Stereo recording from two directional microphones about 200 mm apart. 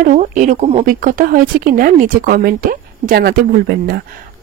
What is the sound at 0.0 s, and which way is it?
Speech, 40° right (ahead or behind).